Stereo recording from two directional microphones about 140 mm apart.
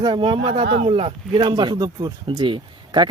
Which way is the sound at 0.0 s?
35° right (ahead or behind).